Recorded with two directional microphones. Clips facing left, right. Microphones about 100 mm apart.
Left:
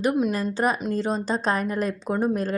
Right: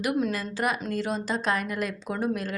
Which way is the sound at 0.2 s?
20° left (ahead or behind).